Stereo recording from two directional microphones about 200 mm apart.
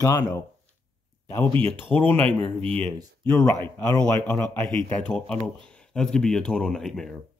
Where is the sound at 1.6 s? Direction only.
10° left (ahead or behind).